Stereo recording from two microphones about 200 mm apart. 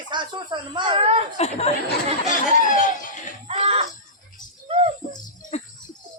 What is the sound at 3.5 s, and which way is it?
Screaming, 30° right (ahead or behind).